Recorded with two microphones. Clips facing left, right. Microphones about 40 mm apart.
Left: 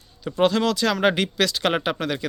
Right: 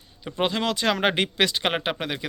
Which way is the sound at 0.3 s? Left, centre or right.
Centre.